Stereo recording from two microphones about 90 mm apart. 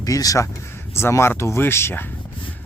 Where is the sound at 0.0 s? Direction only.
40° left (ahead or behind).